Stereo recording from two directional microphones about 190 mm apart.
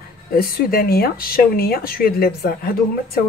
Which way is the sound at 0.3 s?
50° left (ahead or behind).